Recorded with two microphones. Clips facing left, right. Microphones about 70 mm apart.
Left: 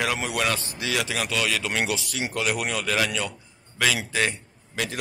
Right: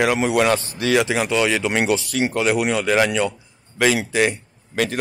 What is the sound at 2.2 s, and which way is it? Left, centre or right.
A man's voice, right.